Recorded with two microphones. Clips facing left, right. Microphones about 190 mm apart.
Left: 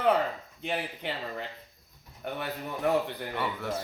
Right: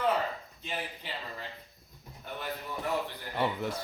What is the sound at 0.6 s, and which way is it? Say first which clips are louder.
Speech: left 7 dB; 60° left (ahead or behind).